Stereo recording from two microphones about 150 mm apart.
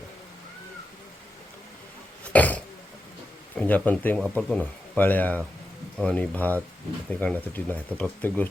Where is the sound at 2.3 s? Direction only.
10° left (ahead or behind).